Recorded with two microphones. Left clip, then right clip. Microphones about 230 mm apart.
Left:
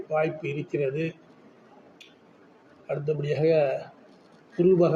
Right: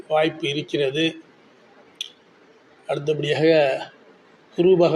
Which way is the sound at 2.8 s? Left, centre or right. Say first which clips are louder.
Right 6 dB; centre.